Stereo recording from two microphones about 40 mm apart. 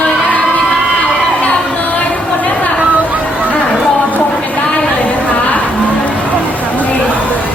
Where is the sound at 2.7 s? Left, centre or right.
Right.